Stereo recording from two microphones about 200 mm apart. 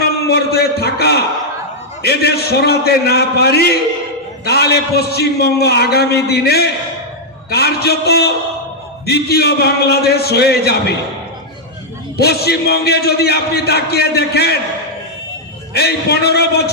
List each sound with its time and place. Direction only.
0.3 s a man's voice: 55° left (ahead or behind)
12.2 s a man's voice: 50° left (ahead or behind)
15.7 s a man's voice: 55° left (ahead or behind)